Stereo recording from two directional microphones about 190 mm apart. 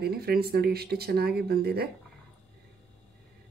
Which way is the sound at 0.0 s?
55° right (ahead or behind).